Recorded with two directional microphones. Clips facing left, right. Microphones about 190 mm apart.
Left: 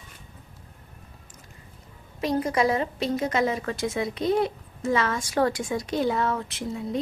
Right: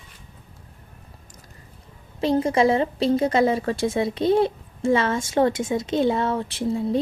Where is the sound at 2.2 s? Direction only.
25° right (ahead or behind).